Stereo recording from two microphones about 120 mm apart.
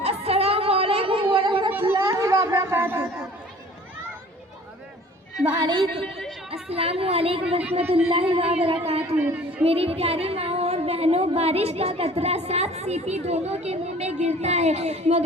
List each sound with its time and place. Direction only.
0.0 s a sound: 55° right (ahead or behind)
2.0 s a sound: 30° right (ahead or behind)
5.5 s a woman's voice: 35° right (ahead or behind)
6.5 s a woman's voice: 55° right (ahead or behind)
9.1 s speech: 15° right (ahead or behind)
9.6 s a woman's voice: 55° right (ahead or behind)